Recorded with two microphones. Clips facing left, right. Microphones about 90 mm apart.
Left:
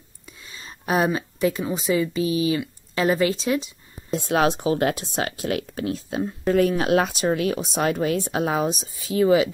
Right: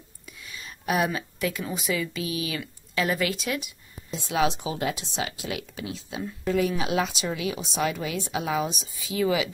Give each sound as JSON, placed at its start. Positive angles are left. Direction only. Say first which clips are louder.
{"t": 0.4, "sound": "speech", "louder": "even", "side_deg": 30}
{"t": 4.1, "sound": "speech", "louder": "left 5 dB", "side_deg": 50}